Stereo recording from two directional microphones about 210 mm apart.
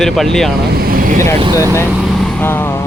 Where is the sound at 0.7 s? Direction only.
45° right (ahead or behind).